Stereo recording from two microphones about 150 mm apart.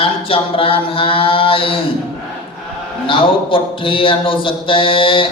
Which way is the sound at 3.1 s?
35° left (ahead or behind).